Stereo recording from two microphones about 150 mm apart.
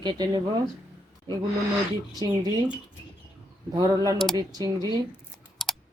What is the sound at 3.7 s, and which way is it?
Speech, 25° right (ahead or behind).